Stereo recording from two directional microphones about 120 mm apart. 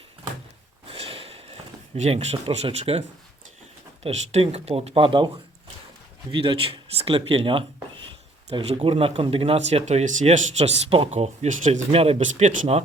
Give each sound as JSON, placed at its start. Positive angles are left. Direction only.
{"t": 0.9, "sound": "a sound", "side_deg": -55}
{"t": 4.0, "sound": "speech", "side_deg": -60}
{"t": 6.3, "sound": "speech", "side_deg": -45}
{"t": 11.1, "sound": "speech", "side_deg": -75}
{"t": 12.2, "sound": "speech", "side_deg": -90}